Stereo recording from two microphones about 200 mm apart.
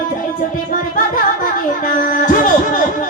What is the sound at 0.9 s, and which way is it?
Music, 40° left (ahead or behind).